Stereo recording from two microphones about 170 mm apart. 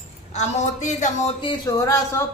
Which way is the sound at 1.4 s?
30° left (ahead or behind).